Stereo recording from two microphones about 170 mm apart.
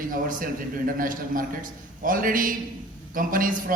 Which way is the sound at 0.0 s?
55° right (ahead or behind).